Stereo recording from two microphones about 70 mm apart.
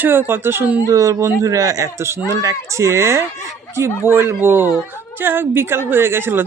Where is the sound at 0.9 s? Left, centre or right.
Right.